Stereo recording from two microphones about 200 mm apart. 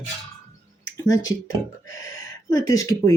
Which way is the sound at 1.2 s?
75° left (ahead or behind).